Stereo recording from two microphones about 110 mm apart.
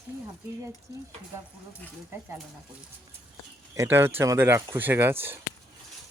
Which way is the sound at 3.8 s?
20° right (ahead or behind).